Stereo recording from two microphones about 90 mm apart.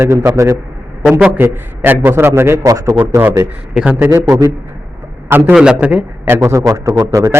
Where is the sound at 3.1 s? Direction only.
30° right (ahead or behind).